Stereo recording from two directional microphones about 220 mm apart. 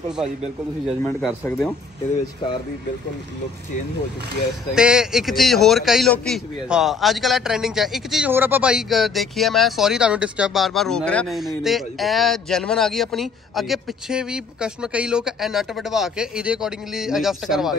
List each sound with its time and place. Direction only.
0.8 s a man's voice: centre (ahead or behind)
1.4 s speech: 10° left (ahead or behind)
4.7 s a man's voice: 5° right (ahead or behind)